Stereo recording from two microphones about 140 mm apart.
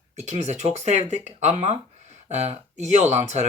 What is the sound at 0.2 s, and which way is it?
Speech, 55° right (ahead or behind).